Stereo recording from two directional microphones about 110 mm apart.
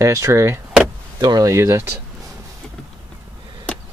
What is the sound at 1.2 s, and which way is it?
Speech, 35° right (ahead or behind).